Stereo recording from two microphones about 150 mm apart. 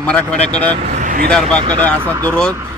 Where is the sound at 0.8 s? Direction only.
55° right (ahead or behind).